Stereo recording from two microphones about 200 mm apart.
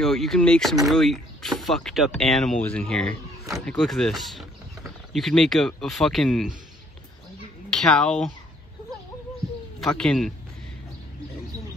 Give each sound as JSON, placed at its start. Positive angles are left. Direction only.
{"t": 0.0, "sound": "speech", "side_deg": 0}
{"t": 7.8, "sound": "speech", "side_deg": 5}
{"t": 9.8, "sound": "speech", "side_deg": 5}